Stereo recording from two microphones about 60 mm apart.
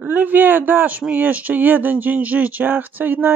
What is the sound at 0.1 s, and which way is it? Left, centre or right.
Speech, right.